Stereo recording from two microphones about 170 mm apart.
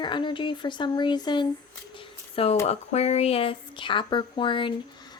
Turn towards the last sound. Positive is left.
turn(degrees=25)  # may be behind; listen again after turning